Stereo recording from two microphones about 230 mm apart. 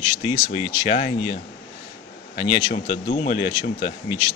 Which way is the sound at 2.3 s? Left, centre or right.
Left.